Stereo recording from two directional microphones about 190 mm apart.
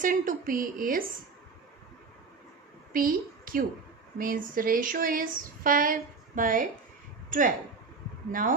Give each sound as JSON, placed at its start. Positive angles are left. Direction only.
{"t": 0.0, "sound": "speech", "side_deg": -45}
{"t": 2.9, "sound": "a woman's voice", "side_deg": -45}